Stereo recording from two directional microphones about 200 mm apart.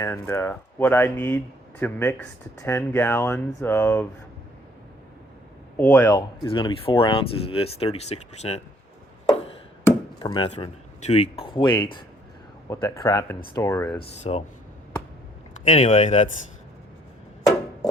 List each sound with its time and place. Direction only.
0.0 s speech: 15° left (ahead or behind)
5.7 s speech: 10° left (ahead or behind); by 8.6 s 30° left (ahead or behind)
10.2 s speech: 20° left (ahead or behind)
14.3 s speech: 30° left (ahead or behind)
15.6 s speech: 35° left (ahead or behind)